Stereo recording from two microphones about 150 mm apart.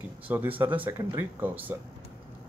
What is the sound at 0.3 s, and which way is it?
Speech, 10° right (ahead or behind).